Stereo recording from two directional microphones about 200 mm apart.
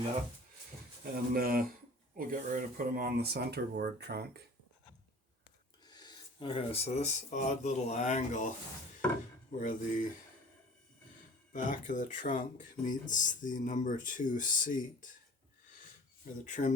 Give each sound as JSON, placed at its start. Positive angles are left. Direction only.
{"t": 1.1, "sound": "speech", "side_deg": -50}
{"t": 5.8, "sound": "speech", "side_deg": 20}
{"t": 9.6, "sound": "speech", "side_deg": 40}
{"t": 11.5, "sound": "speech", "side_deg": 40}
{"t": 16.4, "sound": "speech", "side_deg": 40}